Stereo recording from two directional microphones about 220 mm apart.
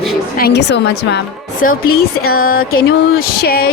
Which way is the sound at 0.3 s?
45° left (ahead or behind).